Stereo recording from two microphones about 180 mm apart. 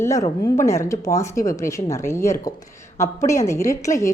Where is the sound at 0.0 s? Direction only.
15° left (ahead or behind).